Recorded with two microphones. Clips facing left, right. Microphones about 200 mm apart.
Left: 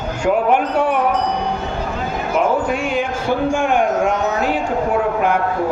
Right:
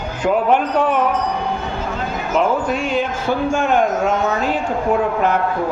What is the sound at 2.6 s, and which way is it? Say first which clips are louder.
A man's voice: even; 10° left (ahead or behind).